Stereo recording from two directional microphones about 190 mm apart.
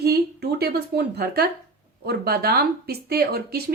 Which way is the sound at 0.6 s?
55° right (ahead or behind).